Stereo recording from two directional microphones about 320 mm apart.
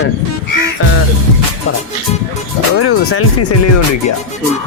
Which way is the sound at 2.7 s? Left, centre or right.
Left.